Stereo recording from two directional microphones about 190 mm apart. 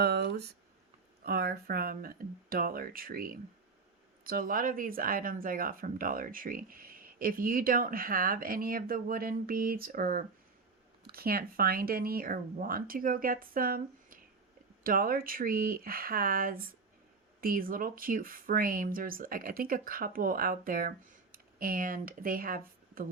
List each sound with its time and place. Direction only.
0.0 s speech: 60° right (ahead or behind)